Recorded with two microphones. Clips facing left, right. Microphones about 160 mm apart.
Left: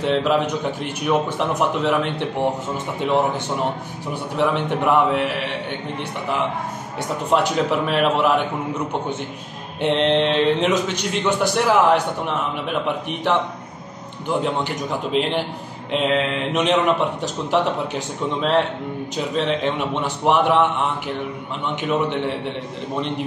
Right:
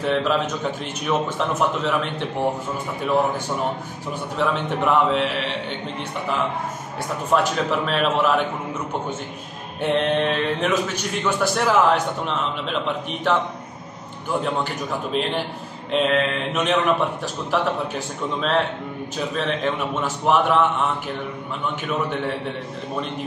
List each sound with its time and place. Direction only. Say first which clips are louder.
0.0 s a man's voice: left 2 dB; 20° left (ahead or behind)
4.1 s a man's voice: left 2 dB; 15° left (ahead or behind)
7.2 s a man's voice: left 2 dB; 15° left (ahead or behind)
9.8 s a man's voice: left 2 dB; 20° left (ahead or behind)
15.9 s a man's voice: even; 20° left (ahead or behind)